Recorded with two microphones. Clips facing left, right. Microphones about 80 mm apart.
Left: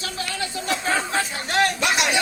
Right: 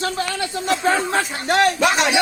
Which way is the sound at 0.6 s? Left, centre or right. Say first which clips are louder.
Right 5 dB; right.